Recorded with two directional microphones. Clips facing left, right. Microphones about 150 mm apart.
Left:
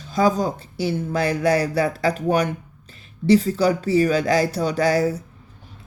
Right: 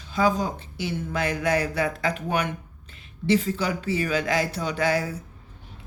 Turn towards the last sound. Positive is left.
turn(degrees=35)  # may be behind; listen again after turning